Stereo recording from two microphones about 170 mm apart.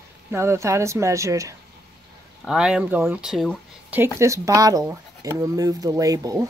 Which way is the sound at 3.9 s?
15° right (ahead or behind).